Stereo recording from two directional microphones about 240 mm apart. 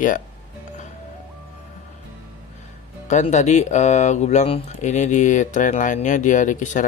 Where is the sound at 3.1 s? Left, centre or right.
Left.